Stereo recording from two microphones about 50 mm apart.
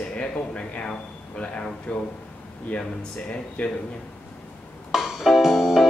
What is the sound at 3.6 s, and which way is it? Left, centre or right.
Speech, left.